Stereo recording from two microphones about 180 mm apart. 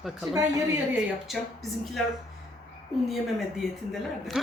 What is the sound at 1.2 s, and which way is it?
Speech, centre (ahead or behind).